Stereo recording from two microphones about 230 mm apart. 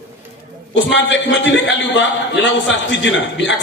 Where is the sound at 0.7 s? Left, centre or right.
Left.